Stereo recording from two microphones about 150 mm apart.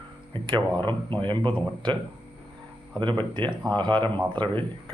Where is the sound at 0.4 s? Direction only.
30° right (ahead or behind).